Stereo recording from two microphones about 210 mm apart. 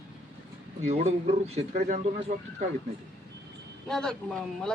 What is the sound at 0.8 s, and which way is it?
Speech, 30° right (ahead or behind).